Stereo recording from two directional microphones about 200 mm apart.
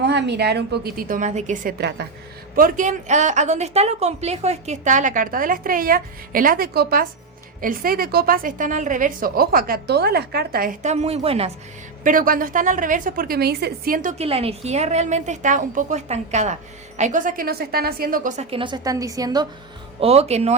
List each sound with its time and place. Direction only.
0.0 s a woman's voice: 60° right (ahead or behind); by 11.5 s 30° right (ahead or behind)
12.0 s a woman's voice: 45° right (ahead or behind); by 19.5 s 20° right (ahead or behind)
20.0 s a woman's voice: 30° right (ahead or behind)